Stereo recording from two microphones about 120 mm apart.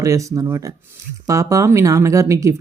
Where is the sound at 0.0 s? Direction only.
25° right (ahead or behind).